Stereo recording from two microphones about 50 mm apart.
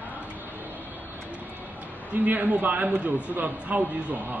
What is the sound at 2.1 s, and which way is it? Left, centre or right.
A man's voice, right.